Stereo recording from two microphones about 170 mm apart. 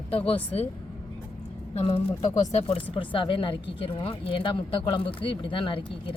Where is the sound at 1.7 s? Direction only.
35° left (ahead or behind).